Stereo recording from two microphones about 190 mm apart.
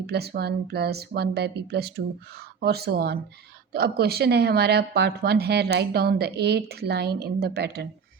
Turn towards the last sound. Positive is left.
turn(degrees=-60)  # may be behind; listen again after turning